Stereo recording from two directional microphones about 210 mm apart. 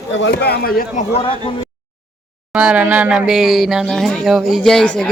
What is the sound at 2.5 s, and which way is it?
Speech, 5° right (ahead or behind).